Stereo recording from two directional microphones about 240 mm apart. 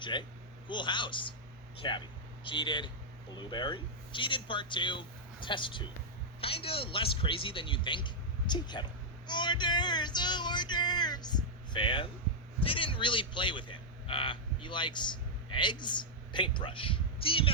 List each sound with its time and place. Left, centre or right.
0.0 s a man's voice: centre